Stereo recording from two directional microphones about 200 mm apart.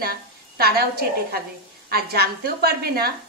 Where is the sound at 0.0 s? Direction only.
50° right (ahead or behind).